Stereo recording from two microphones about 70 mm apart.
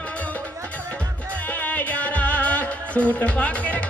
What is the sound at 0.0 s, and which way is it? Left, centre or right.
Music, left.